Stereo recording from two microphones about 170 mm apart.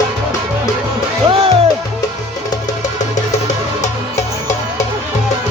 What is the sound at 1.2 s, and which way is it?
Music, 35° right (ahead or behind).